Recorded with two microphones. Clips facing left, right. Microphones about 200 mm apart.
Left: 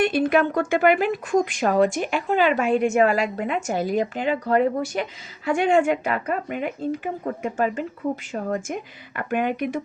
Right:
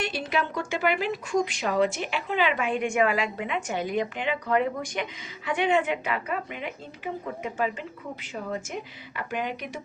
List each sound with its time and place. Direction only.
0.0 s a woman's voice: 55° left (ahead or behind)